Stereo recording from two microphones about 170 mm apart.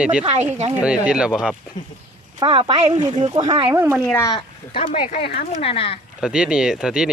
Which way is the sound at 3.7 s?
15° right (ahead or behind).